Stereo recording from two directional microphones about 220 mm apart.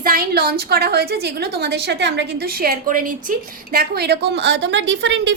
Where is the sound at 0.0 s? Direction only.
40° right (ahead or behind).